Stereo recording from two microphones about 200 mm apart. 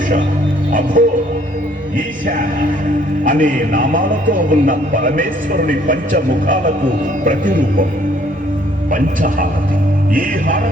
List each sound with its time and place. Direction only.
0.7 s a man's voice: 40° right (ahead or behind)
3.2 s a man's voice: 40° right (ahead or behind)
8.9 s a man's voice: 45° right (ahead or behind)